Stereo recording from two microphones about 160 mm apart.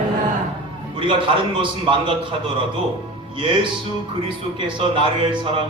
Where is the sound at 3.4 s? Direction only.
30° right (ahead or behind).